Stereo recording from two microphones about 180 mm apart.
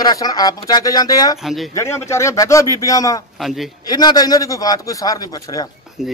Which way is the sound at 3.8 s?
20° left (ahead or behind).